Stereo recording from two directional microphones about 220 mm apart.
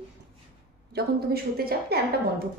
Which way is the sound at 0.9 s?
45° right (ahead or behind).